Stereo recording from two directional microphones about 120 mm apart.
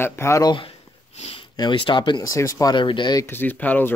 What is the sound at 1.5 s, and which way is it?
Speech, 40° left (ahead or behind).